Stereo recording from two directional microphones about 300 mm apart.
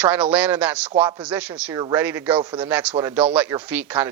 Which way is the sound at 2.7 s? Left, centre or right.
Centre.